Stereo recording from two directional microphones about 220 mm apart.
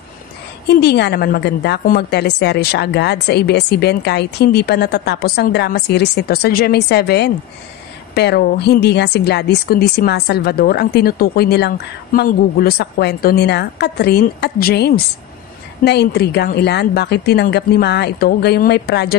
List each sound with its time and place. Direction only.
0.7 s speech: 50° left (ahead or behind)